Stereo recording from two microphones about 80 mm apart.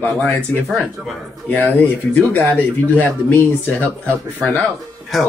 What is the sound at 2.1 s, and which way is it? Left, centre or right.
Speech, left.